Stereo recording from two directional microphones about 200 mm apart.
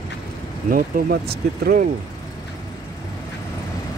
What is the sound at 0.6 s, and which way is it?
Speech, 45° right (ahead or behind).